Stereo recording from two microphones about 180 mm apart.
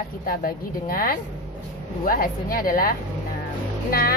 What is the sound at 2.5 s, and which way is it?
Speech, 55° left (ahead or behind).